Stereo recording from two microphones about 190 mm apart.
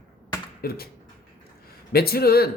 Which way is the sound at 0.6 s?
55° left (ahead or behind).